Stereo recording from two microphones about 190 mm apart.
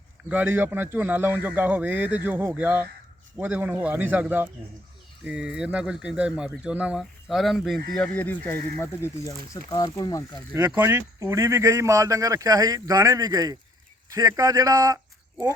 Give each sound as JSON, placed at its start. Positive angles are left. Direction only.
{"t": 0.3, "sound": "speech", "side_deg": -10}
{"t": 10.8, "sound": "speech", "side_deg": -10}